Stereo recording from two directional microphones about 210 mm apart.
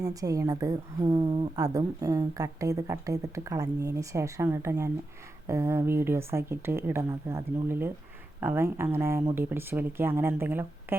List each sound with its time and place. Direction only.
0.0 s speech: 15° right (ahead or behind)